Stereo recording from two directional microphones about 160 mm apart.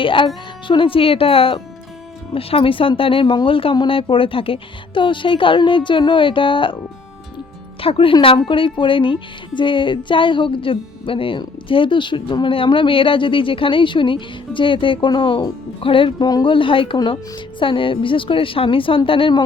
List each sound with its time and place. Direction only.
0.0 s a woman's voice: 30° left (ahead or behind)
7.8 s a woman's voice: 35° left (ahead or behind)